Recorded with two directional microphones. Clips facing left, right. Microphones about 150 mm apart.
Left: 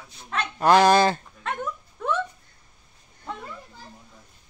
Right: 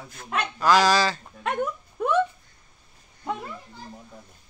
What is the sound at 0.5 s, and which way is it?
Speech, 55° left (ahead or behind).